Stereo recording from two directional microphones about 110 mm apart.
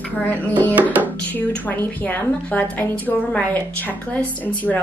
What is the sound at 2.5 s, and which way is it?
A woman's voice, 15° left (ahead or behind).